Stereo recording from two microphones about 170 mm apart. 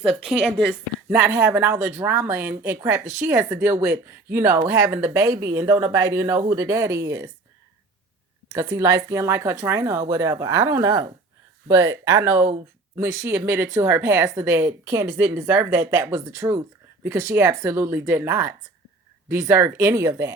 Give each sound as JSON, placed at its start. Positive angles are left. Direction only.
{"t": 0.0, "sound": "a woman's voice", "side_deg": 0}
{"t": 1.1, "sound": "speech", "side_deg": -15}
{"t": 8.5, "sound": "speech", "side_deg": -20}